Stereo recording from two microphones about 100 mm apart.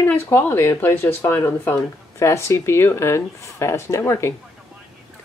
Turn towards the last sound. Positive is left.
turn(degrees=25)  # may be behind; listen again after turning